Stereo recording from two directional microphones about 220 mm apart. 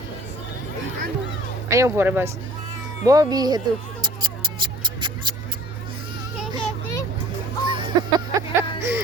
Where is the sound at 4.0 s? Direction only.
20° right (ahead or behind).